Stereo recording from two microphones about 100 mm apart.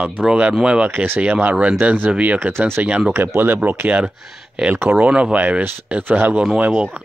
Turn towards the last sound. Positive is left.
turn(degrees=-10)  # may be behind; listen again after turning